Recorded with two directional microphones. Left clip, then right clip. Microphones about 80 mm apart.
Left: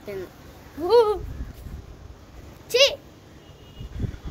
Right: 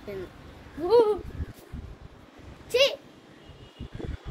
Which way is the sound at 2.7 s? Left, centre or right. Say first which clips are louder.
Left 4 dB; right.